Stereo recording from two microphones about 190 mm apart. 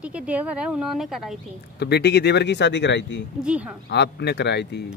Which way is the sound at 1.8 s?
60° left (ahead or behind).